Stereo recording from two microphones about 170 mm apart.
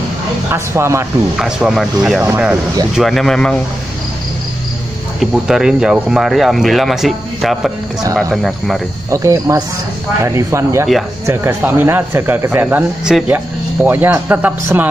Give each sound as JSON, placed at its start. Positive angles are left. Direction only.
{"t": 0.5, "sound": "speech", "side_deg": -15}
{"t": 1.3, "sound": "speech", "side_deg": 0}
{"t": 3.0, "sound": "speech", "side_deg": 0}
{"t": 5.2, "sound": "speech", "side_deg": -5}
{"t": 9.1, "sound": "speech", "side_deg": -20}